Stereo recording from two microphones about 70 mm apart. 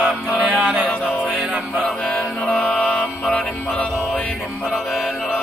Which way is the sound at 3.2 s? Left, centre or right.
Centre.